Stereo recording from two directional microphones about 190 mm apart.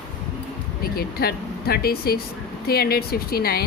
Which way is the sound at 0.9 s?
55° left (ahead or behind).